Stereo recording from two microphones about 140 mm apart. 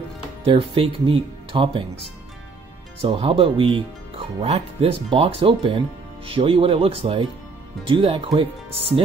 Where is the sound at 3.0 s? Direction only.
40° right (ahead or behind).